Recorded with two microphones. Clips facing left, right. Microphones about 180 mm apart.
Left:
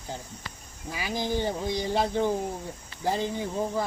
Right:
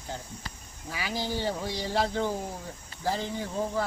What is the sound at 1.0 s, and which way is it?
Speech, 15° left (ahead or behind).